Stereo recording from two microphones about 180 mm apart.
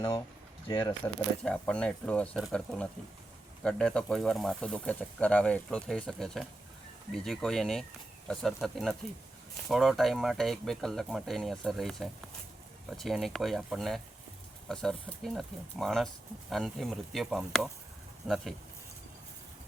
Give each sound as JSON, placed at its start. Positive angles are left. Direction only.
{"t": 0.7, "sound": "speech", "side_deg": 25}
{"t": 1.0, "sound": "speech", "side_deg": 5}